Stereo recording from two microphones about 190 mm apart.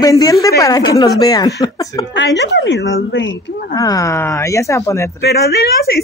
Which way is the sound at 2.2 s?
65° left (ahead or behind).